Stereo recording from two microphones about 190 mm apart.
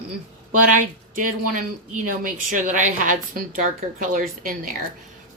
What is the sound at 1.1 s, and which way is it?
A woman's voice, 45° right (ahead or behind).